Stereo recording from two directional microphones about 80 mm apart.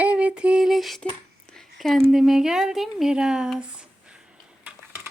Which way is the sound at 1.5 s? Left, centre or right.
Centre.